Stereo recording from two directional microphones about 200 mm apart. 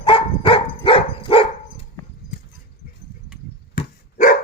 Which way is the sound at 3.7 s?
40° left (ahead or behind).